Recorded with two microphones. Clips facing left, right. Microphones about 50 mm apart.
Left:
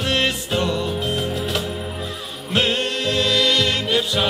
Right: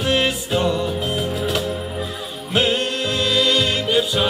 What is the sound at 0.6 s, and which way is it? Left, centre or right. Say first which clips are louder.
Music: right 2 dB; right.